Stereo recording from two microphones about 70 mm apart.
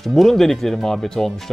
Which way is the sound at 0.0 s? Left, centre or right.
Centre.